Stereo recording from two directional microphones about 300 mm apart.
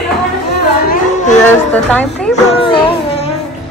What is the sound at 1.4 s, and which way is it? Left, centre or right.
Speech, centre.